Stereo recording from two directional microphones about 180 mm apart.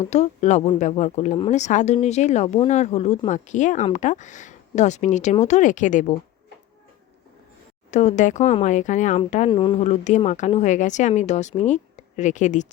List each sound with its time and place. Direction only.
0.0 s speech: 40° left (ahead or behind)
7.9 s speech: 40° left (ahead or behind)
9.5 s speech: 30° left (ahead or behind)